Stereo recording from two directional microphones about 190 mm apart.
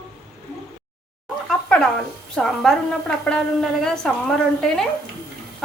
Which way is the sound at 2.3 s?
Centre (ahead or behind).